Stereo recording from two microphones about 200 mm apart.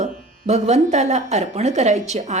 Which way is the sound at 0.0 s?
35° right (ahead or behind).